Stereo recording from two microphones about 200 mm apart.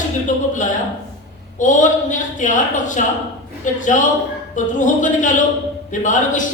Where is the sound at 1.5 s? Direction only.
40° left (ahead or behind).